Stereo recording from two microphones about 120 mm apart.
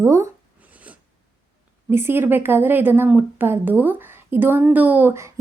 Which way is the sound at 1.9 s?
20° right (ahead or behind).